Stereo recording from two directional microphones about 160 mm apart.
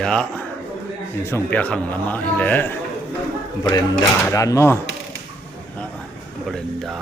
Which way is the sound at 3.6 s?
25° left (ahead or behind).